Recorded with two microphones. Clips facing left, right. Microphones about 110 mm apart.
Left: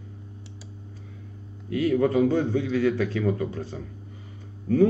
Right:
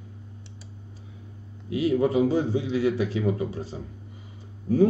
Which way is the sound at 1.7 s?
15° right (ahead or behind).